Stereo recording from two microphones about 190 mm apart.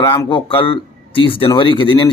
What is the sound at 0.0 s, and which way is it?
Speech, 20° left (ahead or behind).